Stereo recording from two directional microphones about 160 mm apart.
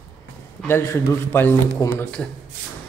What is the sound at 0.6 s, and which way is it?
A man's voice, 15° left (ahead or behind).